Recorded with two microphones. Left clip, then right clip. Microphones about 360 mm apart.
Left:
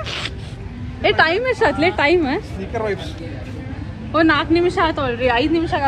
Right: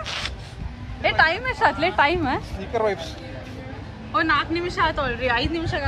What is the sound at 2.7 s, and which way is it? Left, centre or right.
Speech, right.